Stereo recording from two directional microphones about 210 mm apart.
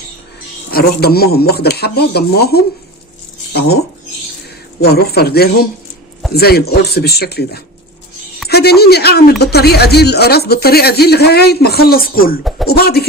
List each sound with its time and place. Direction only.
0.7 s speech: 45° left (ahead or behind)
4.8 s speech: 50° left (ahead or behind)